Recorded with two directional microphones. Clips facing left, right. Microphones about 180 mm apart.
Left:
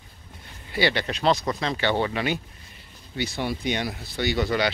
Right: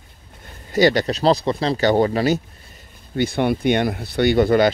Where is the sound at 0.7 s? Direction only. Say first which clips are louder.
Right 8 dB; 40° right (ahead or behind).